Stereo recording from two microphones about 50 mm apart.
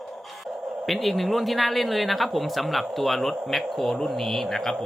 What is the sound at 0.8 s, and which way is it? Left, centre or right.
Speech, centre.